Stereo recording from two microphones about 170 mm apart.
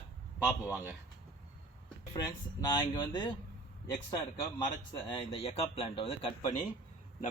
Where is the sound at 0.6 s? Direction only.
10° right (ahead or behind).